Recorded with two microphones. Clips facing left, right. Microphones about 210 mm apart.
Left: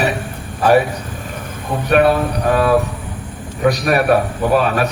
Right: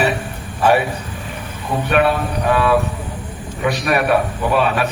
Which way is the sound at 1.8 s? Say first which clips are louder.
Left 4 dB; 40° left (ahead or behind).